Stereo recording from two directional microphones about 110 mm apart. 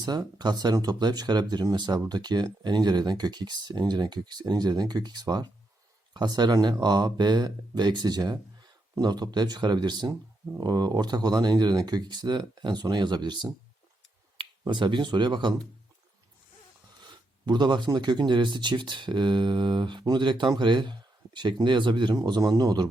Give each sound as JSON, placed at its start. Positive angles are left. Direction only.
{"t": 0.0, "sound": "speech", "side_deg": -40}
{"t": 14.7, "sound": "speech", "side_deg": -45}
{"t": 17.1, "sound": "speech", "side_deg": -40}